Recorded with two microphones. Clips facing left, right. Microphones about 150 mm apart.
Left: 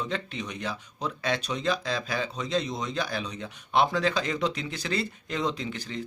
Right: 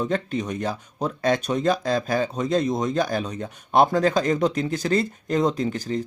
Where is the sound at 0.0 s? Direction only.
45° right (ahead or behind).